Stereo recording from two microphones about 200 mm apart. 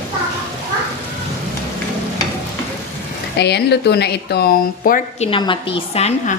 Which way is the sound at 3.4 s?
55° left (ahead or behind).